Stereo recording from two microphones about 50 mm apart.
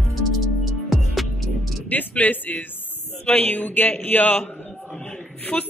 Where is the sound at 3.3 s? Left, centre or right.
Left.